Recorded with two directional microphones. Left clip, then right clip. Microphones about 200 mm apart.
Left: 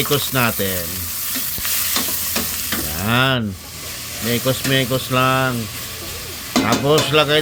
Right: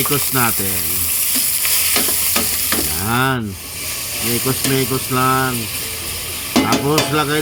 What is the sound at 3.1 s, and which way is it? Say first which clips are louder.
Speech: left 1 dB; 15° left (ahead or behind).